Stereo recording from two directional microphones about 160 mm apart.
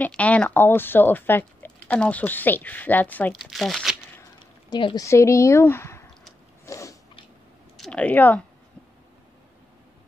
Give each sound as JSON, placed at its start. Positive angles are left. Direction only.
{"t": 0.0, "sound": "speech", "side_deg": 10}
{"t": 3.3, "sound": "speech", "side_deg": 0}
{"t": 4.6, "sound": "speech", "side_deg": 30}
{"t": 5.0, "sound": "speech", "side_deg": 20}
{"t": 6.6, "sound": "biting", "side_deg": 20}
{"t": 7.7, "sound": "a sound", "side_deg": 5}